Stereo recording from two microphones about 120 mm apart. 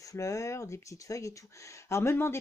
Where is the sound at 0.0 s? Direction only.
25° left (ahead or behind).